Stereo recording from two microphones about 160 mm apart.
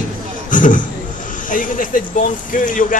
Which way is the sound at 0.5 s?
55° left (ahead or behind).